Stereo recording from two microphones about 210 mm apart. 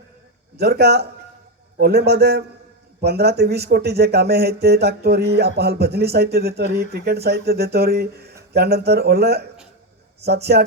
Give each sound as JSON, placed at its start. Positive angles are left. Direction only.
{"t": 0.5, "sound": "speech", "side_deg": -50}